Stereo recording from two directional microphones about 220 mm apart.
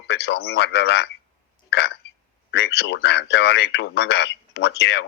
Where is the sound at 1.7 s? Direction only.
50° left (ahead or behind).